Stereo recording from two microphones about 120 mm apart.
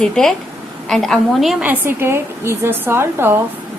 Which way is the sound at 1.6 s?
15° right (ahead or behind).